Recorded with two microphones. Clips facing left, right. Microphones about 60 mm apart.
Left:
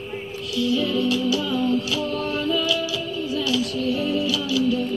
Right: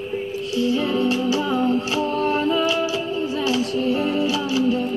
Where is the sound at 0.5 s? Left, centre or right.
Right.